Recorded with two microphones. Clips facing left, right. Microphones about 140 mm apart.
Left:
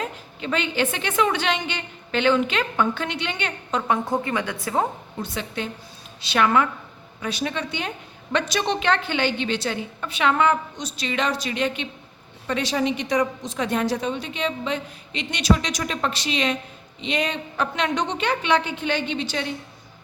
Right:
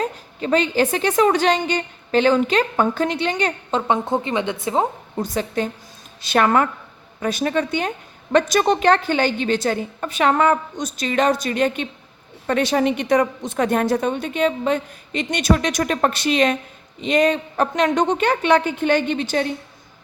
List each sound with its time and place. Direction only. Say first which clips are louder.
0.0 s a woman's voice: right 5 dB; 40° right (ahead or behind); by 4.9 s 20° right (ahead or behind)
5.2 s a woman's voice: right 7 dB; 40° right (ahead or behind)